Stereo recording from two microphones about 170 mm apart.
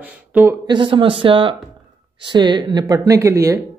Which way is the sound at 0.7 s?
30° right (ahead or behind).